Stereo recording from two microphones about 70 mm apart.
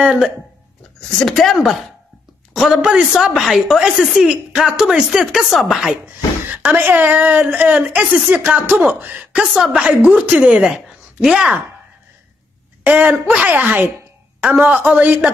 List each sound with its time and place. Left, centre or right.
0.0 s a woman's voice: centre
6.5 s a woman's voice: right
12.8 s a woman's voice: right